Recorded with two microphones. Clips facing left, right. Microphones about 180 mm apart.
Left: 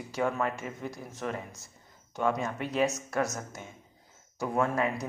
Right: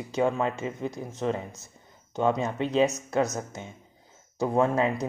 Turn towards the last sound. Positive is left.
turn(degrees=-25)  # may be behind; listen again after turning